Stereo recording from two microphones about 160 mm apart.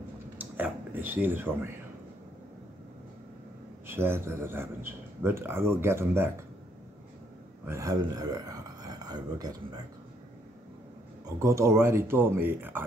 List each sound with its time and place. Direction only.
0.4 s speech: 10° right (ahead or behind)
3.8 s speech: 15° right (ahead or behind)
7.6 s speech: 20° right (ahead or behind)
11.3 s speech: 20° right (ahead or behind)